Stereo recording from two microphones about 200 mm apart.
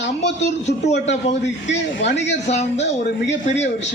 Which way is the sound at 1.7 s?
60° left (ahead or behind).